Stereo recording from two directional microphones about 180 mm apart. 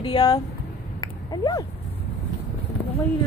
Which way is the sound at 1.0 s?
20° left (ahead or behind).